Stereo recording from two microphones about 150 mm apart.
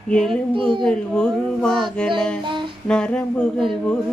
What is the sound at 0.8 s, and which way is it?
Music, 5° left (ahead or behind).